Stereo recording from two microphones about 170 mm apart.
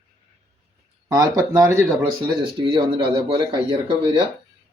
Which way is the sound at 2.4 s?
30° right (ahead or behind).